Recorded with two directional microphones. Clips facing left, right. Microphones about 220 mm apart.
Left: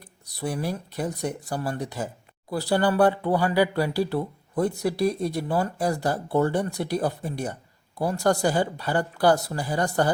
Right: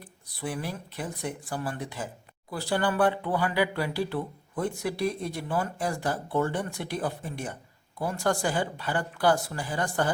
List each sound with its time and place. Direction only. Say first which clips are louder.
0.3 s speech: left 5 dB; 40° left (ahead or behind)